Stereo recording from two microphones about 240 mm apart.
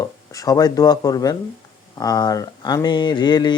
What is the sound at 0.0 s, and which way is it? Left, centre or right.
Speech, centre.